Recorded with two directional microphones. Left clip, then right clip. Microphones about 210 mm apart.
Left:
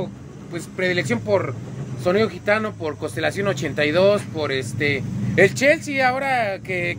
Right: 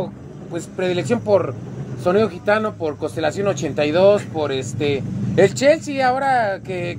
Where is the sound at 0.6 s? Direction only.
25° left (ahead or behind).